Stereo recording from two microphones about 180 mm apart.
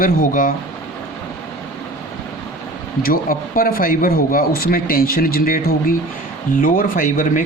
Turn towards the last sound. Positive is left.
turn(degrees=50)  # may be behind; listen again after turning